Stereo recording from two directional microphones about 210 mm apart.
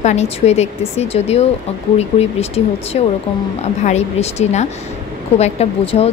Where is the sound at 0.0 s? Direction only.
30° left (ahead or behind).